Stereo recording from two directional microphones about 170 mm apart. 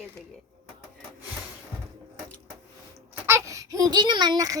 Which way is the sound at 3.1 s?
15° right (ahead or behind).